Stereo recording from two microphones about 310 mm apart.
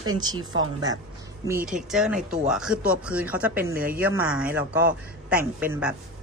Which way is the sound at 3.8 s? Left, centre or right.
Right.